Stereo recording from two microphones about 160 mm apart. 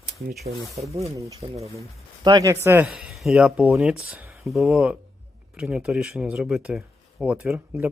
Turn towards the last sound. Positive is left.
turn(degrees=-10)  # may be behind; listen again after turning